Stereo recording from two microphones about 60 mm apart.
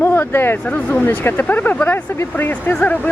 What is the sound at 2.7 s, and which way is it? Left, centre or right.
Speech, left.